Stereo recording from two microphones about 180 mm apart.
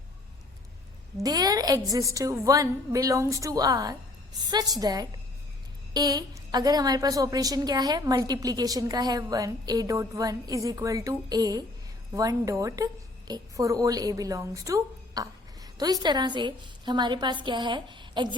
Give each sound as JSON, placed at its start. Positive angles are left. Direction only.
{"t": 1.2, "sound": "a woman's voice", "side_deg": -20}